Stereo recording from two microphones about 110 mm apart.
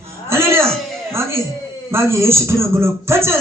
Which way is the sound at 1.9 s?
25° right (ahead or behind).